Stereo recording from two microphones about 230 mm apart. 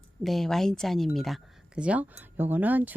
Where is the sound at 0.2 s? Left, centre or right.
Centre.